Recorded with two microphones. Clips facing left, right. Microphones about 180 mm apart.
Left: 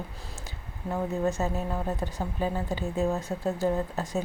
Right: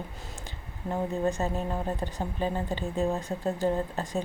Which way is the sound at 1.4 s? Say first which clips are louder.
Even; centre (ahead or behind).